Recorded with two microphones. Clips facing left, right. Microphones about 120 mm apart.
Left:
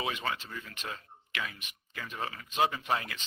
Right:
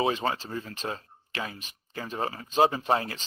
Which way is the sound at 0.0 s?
35° right (ahead or behind).